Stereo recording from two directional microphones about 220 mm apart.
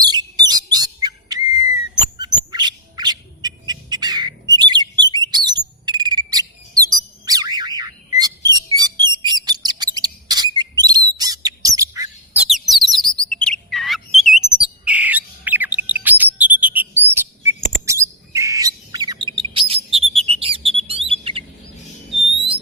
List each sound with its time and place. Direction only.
0.0 s chirp: 20° right (ahead or behind)
2.1 s bird: 20° right (ahead or behind)
5.1 s chirp: 20° right (ahead or behind)
6.7 s bird: 15° right (ahead or behind)
8.2 s chirp: 15° right (ahead or behind); by 14.3 s centre (ahead or behind)
14.6 s bird: 5° right (ahead or behind); by 21.4 s 25° right (ahead or behind)